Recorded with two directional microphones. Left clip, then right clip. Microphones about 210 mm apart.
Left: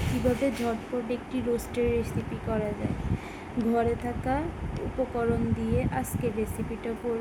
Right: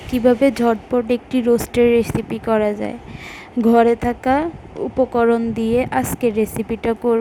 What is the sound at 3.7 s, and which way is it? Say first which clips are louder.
Speech: right 13 dB; 45° right (ahead or behind).